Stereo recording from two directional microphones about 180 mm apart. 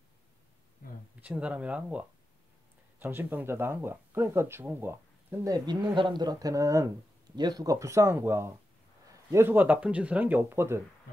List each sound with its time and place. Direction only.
1.2 s speech: 5° right (ahead or behind)